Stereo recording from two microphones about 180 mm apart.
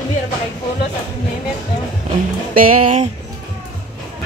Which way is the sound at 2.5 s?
50° right (ahead or behind).